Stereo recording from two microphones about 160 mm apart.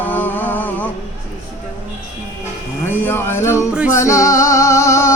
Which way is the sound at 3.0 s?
15° left (ahead or behind).